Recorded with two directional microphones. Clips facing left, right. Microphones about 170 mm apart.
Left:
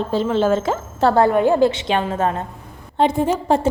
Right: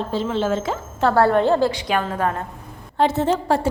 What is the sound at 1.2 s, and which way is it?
A woman's voice, 15° left (ahead or behind).